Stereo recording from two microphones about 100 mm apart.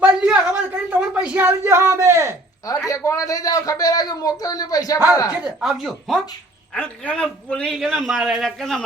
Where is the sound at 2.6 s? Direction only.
35° left (ahead or behind).